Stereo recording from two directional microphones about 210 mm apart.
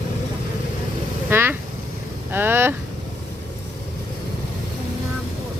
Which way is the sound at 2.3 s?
10° right (ahead or behind).